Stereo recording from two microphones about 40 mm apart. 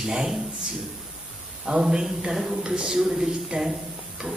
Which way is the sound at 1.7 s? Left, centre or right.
Centre.